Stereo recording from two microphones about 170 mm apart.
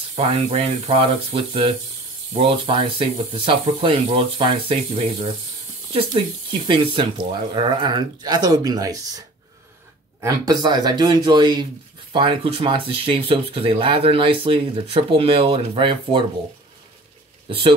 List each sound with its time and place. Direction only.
0.1 s speech: 35° right (ahead or behind)
10.2 s speech: 20° right (ahead or behind)